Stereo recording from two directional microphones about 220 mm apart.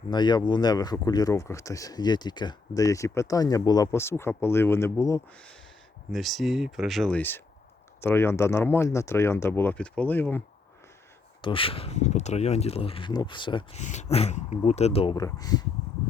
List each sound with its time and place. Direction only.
0.1 s speech: 20° left (ahead or behind)
11.4 s speech: 25° left (ahead or behind)